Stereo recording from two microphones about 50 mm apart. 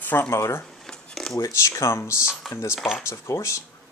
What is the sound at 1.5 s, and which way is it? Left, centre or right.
Speech, left.